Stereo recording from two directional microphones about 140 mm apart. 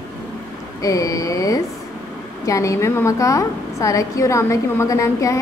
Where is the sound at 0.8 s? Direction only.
25° left (ahead or behind).